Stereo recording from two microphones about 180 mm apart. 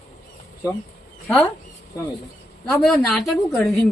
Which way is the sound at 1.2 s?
5° left (ahead or behind).